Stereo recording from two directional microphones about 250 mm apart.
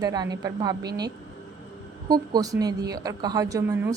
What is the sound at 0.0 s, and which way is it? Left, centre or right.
Speech, centre.